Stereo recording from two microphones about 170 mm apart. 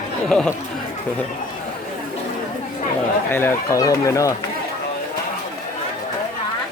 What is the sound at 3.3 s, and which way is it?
Speech, 15° left (ahead or behind).